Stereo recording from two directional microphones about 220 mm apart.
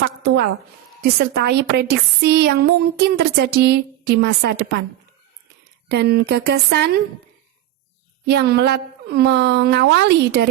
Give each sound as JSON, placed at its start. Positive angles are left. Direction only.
{"t": 0.2, "sound": "a woman's voice", "side_deg": -50}
{"t": 5.9, "sound": "a woman's voice", "side_deg": -50}
{"t": 8.3, "sound": "a woman's voice", "side_deg": -50}